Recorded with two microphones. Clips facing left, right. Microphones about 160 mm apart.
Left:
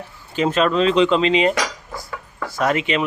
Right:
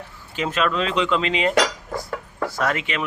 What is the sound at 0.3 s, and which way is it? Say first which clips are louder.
Speech: left 5 dB; 35° left (ahead or behind).